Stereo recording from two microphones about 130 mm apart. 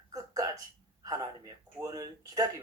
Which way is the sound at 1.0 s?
30° right (ahead or behind).